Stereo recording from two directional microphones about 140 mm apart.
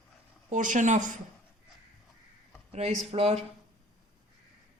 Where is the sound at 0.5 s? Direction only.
65° right (ahead or behind).